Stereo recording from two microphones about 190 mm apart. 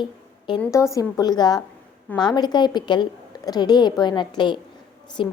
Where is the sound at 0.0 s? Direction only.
25° left (ahead or behind).